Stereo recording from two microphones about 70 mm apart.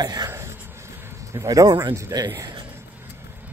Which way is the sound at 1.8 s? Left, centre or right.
Right.